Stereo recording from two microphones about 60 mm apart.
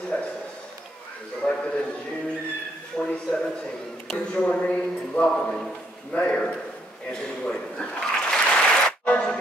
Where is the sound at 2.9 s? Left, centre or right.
Centre.